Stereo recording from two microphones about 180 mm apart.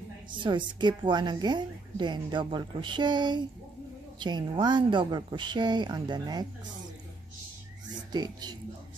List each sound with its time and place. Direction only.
0.3 s a woman's voice: 25° right (ahead or behind)
8.1 s a woman's voice: 25° right (ahead or behind)